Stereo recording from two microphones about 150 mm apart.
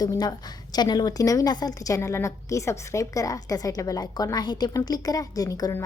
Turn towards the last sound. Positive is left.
turn(degrees=20)  # may be behind; listen again after turning